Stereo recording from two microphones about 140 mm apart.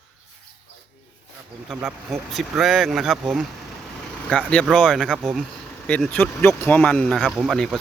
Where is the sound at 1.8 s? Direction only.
Centre (ahead or behind).